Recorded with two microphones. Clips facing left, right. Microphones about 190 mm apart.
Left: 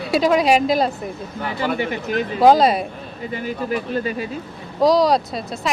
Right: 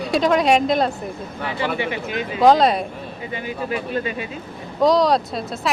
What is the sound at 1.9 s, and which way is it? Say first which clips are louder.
Speech: left 3 dB; 40° left (ahead or behind).